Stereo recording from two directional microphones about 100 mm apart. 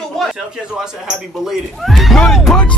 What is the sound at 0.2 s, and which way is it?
Speech, 5° right (ahead or behind).